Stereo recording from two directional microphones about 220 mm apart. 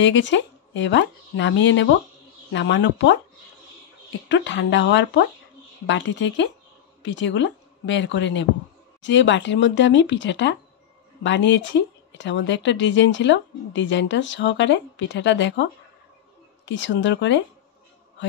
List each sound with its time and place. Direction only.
0.0 s speech: 55° left (ahead or behind)
4.3 s a woman's voice: 55° left (ahead or behind)